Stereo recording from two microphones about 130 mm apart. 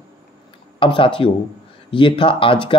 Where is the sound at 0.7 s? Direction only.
40° left (ahead or behind).